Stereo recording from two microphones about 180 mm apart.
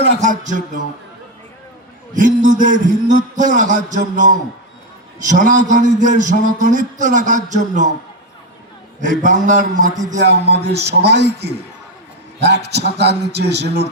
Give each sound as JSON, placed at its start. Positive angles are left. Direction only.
{"t": 0.2, "sound": "a man's voice", "side_deg": -45}
{"t": 2.1, "sound": "a man's voice", "side_deg": -45}
{"t": 9.0, "sound": "a man's voice", "side_deg": -45}
{"t": 10.2, "sound": "a man's voice", "side_deg": -70}